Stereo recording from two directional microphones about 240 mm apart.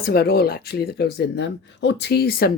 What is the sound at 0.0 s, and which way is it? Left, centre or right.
Speech, left.